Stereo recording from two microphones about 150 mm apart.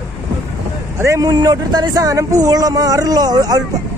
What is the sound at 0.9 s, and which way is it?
A man's voice, 20° right (ahead or behind).